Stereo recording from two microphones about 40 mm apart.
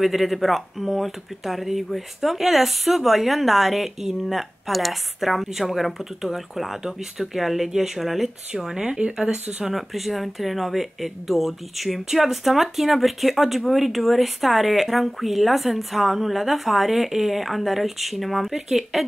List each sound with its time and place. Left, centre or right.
0.0 s speech: centre
8.7 s speech: right
9.7 s speech: centre